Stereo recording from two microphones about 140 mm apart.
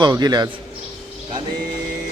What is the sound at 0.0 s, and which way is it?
Speech, 30° right (ahead or behind).